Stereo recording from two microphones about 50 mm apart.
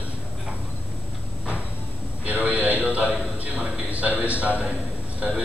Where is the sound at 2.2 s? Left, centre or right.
Right.